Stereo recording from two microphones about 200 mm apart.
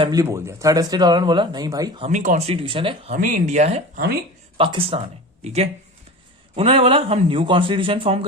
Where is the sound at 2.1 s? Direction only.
40° right (ahead or behind).